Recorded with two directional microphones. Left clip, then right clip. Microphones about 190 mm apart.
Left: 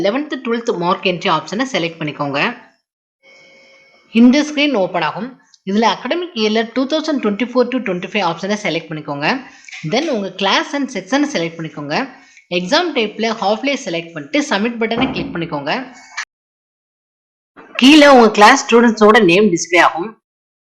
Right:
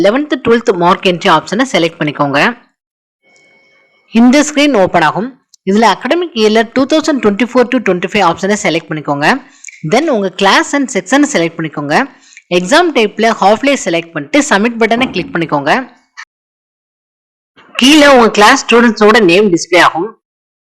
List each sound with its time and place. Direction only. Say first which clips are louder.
0.0 s speech: right 8 dB; 35° right (ahead or behind)
4.1 s speech: right 4 dB; 40° right (ahead or behind)
17.7 s speech: right 2 dB; 25° right (ahead or behind)